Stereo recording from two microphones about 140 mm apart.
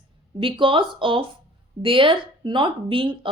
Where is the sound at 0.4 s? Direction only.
35° right (ahead or behind).